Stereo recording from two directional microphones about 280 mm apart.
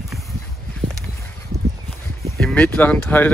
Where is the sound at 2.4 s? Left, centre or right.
Centre.